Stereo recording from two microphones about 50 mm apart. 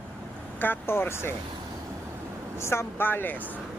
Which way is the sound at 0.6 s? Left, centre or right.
Left.